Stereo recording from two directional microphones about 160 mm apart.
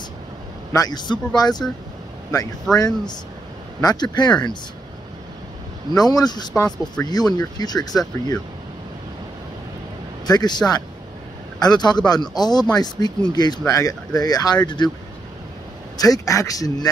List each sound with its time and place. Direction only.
0.7 s speech: 25° left (ahead or behind)
2.7 s speech: 25° left (ahead or behind)
5.9 s speech: 25° left (ahead or behind)
10.2 s speech: 25° left (ahead or behind)
16.0 s speech: 20° left (ahead or behind)